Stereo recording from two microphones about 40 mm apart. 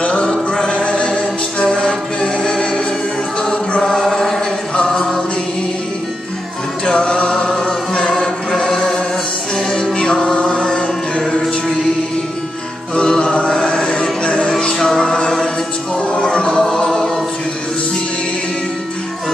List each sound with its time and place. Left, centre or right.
0.0 s music: left
3.8 s chant: centre
6.9 s chant: centre
9.9 s music: centre
12.9 s music: left
13.6 s chant: left
14.2 s music: left